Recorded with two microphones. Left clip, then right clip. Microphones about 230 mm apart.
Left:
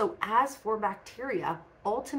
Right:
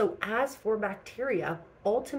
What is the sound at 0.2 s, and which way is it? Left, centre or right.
Speech, left.